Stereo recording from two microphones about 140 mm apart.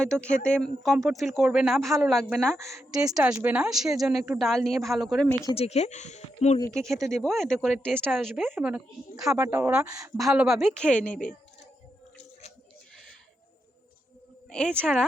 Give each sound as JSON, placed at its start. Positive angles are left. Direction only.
{"t": 0.0, "sound": "speech", "side_deg": 5}
{"t": 3.4, "sound": "speech", "side_deg": -5}
{"t": 5.5, "sound": "speech", "side_deg": 50}
{"t": 7.0, "sound": "speech", "side_deg": 0}
{"t": 9.3, "sound": "speech", "side_deg": -20}
{"t": 9.6, "sound": "speech", "side_deg": -10}
{"t": 9.8, "sound": "speech", "side_deg": -25}
{"t": 10.2, "sound": "speech", "side_deg": -5}
{"t": 14.5, "sound": "speech", "side_deg": 5}